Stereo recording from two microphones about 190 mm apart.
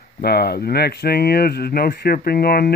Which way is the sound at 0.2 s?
55° left (ahead or behind).